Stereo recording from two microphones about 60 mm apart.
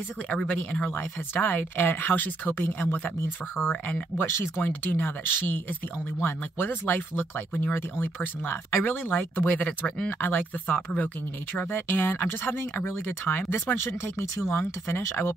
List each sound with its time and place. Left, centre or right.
0.5 s speech: left
4.2 s speech: left
12.0 s speech: left